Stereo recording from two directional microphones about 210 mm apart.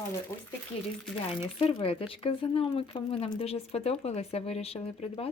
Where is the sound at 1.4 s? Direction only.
25° left (ahead or behind).